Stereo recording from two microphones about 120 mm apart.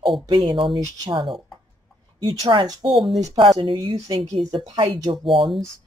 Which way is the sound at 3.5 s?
40° right (ahead or behind).